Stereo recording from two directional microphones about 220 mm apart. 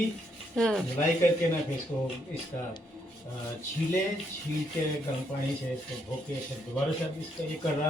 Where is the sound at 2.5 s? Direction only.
15° left (ahead or behind).